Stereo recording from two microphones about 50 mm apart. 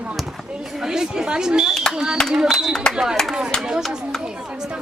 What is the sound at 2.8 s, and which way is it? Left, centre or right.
Speech, centre.